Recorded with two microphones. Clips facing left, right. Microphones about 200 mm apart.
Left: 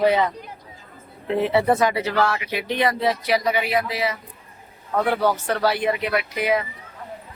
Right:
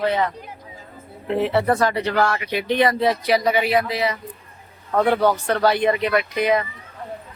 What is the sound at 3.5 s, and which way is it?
Speech, 30° right (ahead or behind).